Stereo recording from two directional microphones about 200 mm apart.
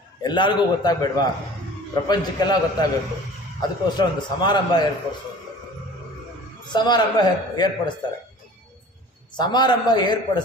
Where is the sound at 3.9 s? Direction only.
20° left (ahead or behind).